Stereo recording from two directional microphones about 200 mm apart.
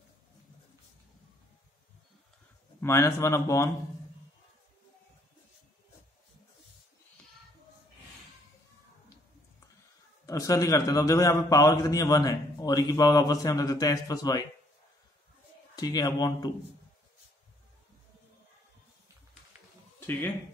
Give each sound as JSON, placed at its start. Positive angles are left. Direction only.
{"t": 2.8, "sound": "a man's voice", "side_deg": 15}
{"t": 10.2, "sound": "a man's voice", "side_deg": 15}
{"t": 15.7, "sound": "a man's voice", "side_deg": 20}